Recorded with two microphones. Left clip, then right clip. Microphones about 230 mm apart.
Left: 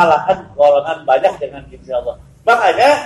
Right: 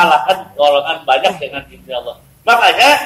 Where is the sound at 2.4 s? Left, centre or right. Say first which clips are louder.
Right 2 dB; right.